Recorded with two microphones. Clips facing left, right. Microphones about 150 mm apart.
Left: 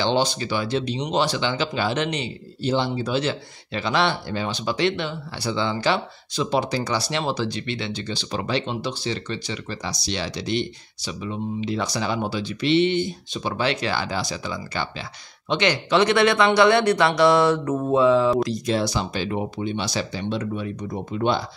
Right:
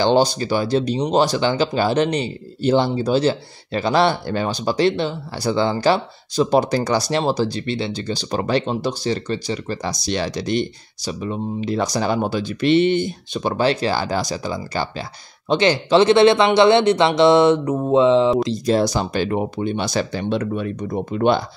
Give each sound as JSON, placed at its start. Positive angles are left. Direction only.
{"t": 0.0, "sound": "speech", "side_deg": -45}
{"t": 2.6, "sound": "speech", "side_deg": -55}
{"t": 3.0, "sound": "speech", "side_deg": -35}
{"t": 18.7, "sound": "speech", "side_deg": -45}